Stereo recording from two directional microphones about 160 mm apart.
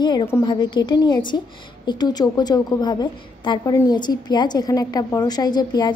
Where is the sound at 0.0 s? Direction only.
30° left (ahead or behind).